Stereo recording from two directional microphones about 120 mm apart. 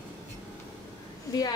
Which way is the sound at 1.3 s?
25° left (ahead or behind).